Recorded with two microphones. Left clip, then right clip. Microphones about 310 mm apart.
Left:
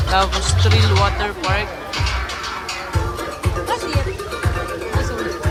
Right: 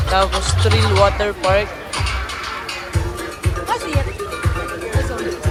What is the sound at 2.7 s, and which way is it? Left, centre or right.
Music, left.